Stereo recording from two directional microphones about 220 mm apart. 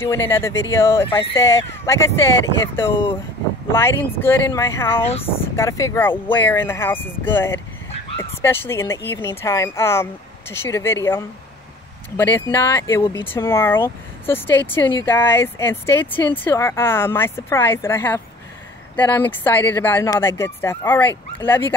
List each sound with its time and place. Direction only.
0.0 s speech: 10° left (ahead or behind)